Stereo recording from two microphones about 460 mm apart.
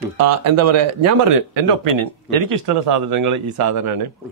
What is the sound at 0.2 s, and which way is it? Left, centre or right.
Speech, right.